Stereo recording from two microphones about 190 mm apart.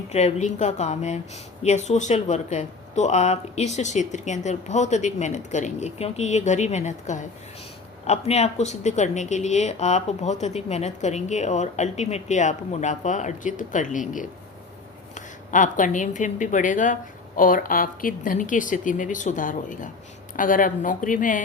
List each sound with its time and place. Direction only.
0.1 s a woman's voice: 35° left (ahead or behind)